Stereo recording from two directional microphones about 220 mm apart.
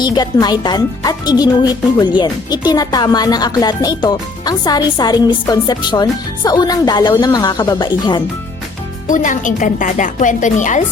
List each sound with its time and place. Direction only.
0.0 s speech: 20° left (ahead or behind)
9.0 s speech: 35° left (ahead or behind)